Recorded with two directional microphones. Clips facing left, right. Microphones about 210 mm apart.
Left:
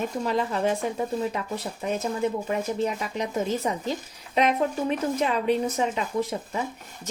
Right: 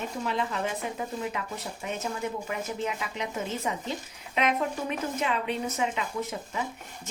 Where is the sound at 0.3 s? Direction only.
40° left (ahead or behind).